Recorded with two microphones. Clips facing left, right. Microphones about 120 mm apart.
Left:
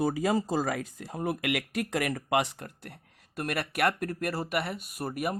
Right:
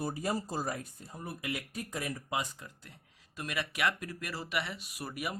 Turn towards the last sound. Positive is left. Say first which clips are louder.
# left 7 dB
turn(degrees=50)  # may be behind; listen again after turning